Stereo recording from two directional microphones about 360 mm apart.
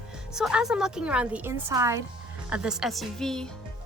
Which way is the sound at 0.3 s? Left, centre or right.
Centre.